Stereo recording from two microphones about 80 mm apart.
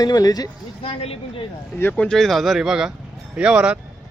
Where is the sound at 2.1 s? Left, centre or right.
Centre.